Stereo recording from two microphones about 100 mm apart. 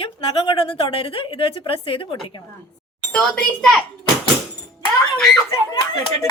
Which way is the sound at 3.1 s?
5° left (ahead or behind).